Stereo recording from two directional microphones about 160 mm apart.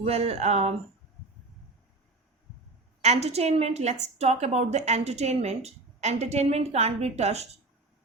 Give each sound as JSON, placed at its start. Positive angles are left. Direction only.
{"t": 0.0, "sound": "a woman's voice", "side_deg": -40}
{"t": 3.0, "sound": "a woman's voice", "side_deg": -45}